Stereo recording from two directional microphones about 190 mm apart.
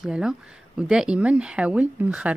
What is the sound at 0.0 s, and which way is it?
A woman's voice, 5° right (ahead or behind).